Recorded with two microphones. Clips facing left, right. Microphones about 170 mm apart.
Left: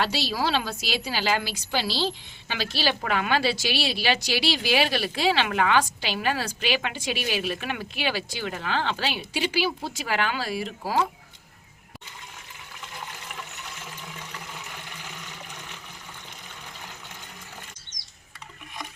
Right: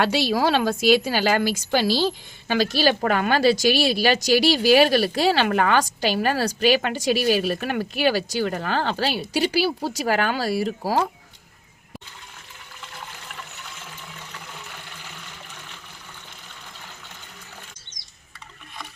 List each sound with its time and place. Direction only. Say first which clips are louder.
0.0 s a woman's voice: right 6 dB; 55° right (ahead or behind); by 11.0 s 40° right (ahead or behind)